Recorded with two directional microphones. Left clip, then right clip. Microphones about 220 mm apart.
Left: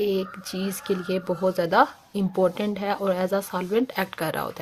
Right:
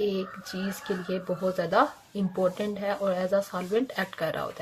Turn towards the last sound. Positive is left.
turn(degrees=40)  # may be behind; listen again after turning